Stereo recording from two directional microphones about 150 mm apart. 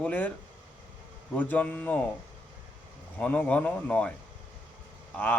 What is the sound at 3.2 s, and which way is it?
Speech, 10° left (ahead or behind).